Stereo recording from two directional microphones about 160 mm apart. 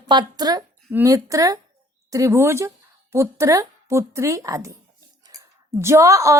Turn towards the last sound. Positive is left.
turn(degrees=-20)  # may be behind; listen again after turning